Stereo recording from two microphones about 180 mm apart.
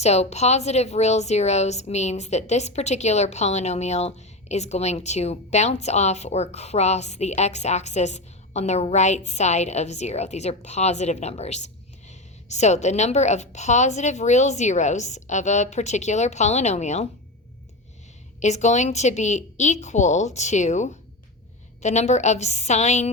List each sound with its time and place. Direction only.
0.0 s a woman's voice: 35° left (ahead or behind)
18.3 s a woman's voice: 40° left (ahead or behind)